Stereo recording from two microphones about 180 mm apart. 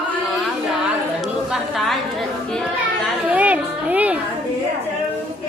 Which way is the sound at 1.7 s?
Centre (ahead or behind).